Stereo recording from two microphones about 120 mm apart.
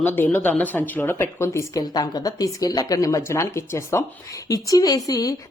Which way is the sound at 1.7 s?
35° left (ahead or behind).